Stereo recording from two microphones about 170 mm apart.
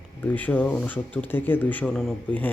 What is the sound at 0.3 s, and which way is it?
Speech, 10° left (ahead or behind).